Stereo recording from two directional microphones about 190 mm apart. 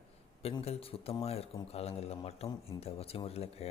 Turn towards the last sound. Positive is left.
turn(degrees=35)  # may be behind; listen again after turning